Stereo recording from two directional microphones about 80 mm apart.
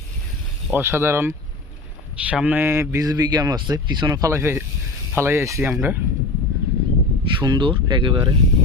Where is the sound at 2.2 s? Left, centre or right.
Centre; by 3.1 s right.